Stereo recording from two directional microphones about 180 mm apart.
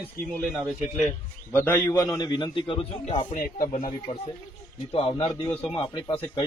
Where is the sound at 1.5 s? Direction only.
10° left (ahead or behind); by 3.3 s 30° left (ahead or behind).